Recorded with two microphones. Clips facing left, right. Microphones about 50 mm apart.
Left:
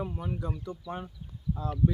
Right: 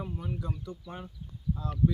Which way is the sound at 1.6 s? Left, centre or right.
Left.